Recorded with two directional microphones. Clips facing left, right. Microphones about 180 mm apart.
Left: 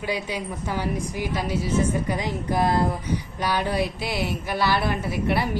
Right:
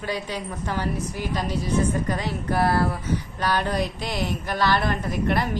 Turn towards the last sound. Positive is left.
turn(degrees=10)  # may be behind; listen again after turning